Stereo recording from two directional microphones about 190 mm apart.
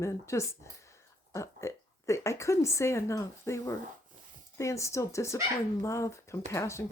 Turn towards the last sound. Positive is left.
turn(degrees=15)  # may be behind; listen again after turning